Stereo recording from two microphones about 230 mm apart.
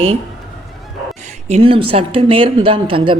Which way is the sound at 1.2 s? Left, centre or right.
Right.